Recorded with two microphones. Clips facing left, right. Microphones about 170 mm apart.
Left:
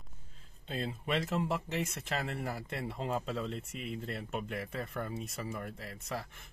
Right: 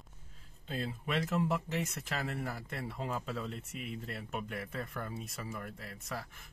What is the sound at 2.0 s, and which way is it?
Speech, 30° left (ahead or behind).